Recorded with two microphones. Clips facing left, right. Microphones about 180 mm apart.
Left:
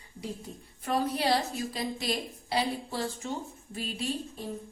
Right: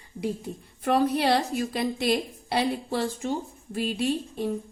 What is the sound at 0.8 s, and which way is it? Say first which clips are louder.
A woman's voice: right 5 dB; 65° right (ahead or behind).